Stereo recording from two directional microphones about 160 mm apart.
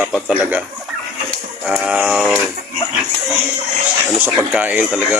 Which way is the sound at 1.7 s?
5° right (ahead or behind).